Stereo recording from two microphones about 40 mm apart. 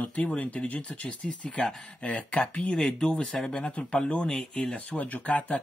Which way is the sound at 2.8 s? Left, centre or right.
Centre.